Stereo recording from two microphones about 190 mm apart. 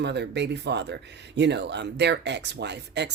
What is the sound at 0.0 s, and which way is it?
Speech, 65° right (ahead or behind).